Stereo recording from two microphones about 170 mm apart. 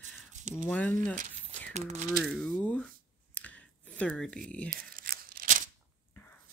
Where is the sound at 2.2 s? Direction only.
5° left (ahead or behind).